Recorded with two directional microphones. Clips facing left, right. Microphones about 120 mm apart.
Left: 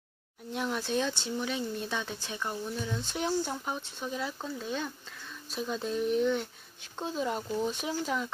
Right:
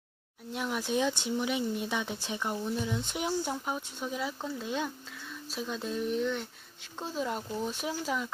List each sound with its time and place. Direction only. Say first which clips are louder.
0.5 s speech: even; 5° right (ahead or behind)
5.5 s speech: left 2 dB; centre (ahead or behind)